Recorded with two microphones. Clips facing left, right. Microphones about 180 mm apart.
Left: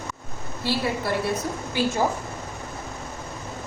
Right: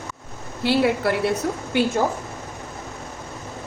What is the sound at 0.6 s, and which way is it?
Speech, 70° right (ahead or behind).